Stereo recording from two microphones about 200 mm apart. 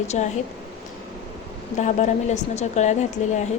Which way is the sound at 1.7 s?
35° left (ahead or behind).